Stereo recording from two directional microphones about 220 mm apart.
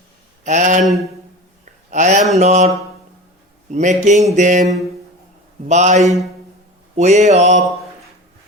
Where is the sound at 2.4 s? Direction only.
30° right (ahead or behind).